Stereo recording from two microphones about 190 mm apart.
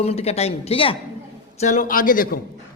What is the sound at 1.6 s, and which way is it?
Speech, 40° left (ahead or behind).